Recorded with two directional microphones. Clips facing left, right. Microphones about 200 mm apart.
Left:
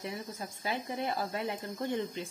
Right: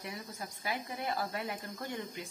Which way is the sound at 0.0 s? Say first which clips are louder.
Left 4 dB; 25° left (ahead or behind).